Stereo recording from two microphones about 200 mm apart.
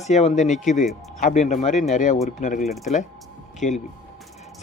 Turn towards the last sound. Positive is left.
turn(degrees=35)  # may be behind; listen again after turning